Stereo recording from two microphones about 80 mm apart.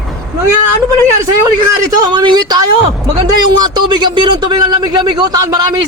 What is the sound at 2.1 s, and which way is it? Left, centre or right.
Speech, right.